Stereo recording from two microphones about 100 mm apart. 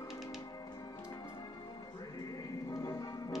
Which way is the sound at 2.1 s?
40° left (ahead or behind).